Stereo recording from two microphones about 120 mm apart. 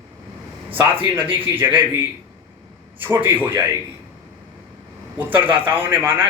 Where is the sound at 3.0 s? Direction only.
15° right (ahead or behind).